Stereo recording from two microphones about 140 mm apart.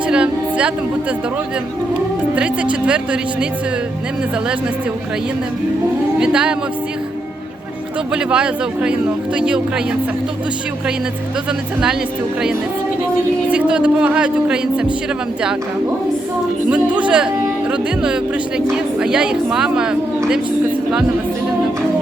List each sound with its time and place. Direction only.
0.1 s a sound: 10° right (ahead or behind)
2.3 s speech: 10° right (ahead or behind)
6.1 s speech: 5° right (ahead or behind)
8.1 s speech: 5° right (ahead or behind)
13.5 s speech: 10° right (ahead or behind)
16.6 s speech: 10° right (ahead or behind)